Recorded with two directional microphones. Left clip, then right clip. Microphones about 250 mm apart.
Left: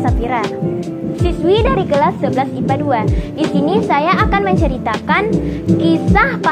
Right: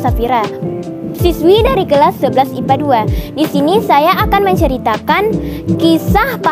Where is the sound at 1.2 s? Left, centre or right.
Right.